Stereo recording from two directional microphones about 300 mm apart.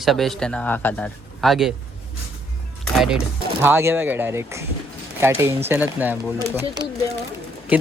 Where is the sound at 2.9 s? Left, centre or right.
Centre.